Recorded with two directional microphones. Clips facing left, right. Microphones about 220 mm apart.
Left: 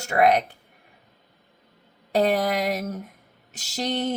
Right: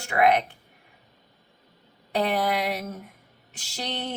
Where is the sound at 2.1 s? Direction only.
40° left (ahead or behind).